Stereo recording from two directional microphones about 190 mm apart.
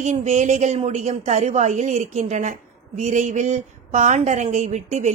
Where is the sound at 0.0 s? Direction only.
40° right (ahead or behind).